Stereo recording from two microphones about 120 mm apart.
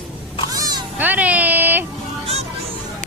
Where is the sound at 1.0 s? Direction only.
15° right (ahead or behind).